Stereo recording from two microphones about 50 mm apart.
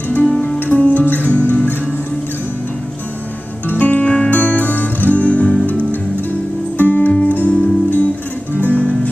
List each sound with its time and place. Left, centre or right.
0.6 s music: left
3.6 s music: left
6.8 s music: left